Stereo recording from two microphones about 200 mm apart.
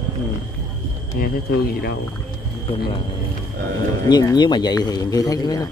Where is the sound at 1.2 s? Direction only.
50° left (ahead or behind).